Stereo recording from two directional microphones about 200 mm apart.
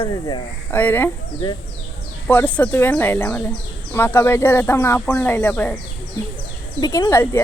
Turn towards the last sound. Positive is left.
turn(degrees=15)  # may be behind; listen again after turning